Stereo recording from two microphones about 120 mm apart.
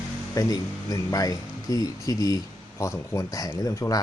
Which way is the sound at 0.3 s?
30° left (ahead or behind).